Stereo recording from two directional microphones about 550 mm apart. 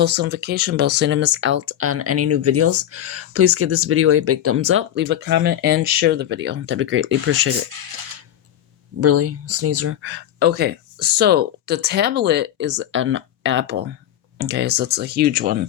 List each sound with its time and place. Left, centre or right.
0.0 s speech: centre
9.0 s speech: right